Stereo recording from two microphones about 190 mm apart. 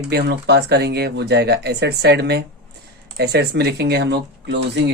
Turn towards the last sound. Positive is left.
turn(degrees=-65)  # may be behind; listen again after turning